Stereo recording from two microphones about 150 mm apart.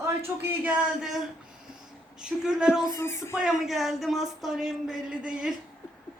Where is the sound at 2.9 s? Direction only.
20° left (ahead or behind).